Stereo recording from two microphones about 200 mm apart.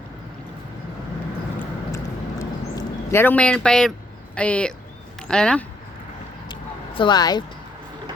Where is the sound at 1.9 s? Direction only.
15° left (ahead or behind).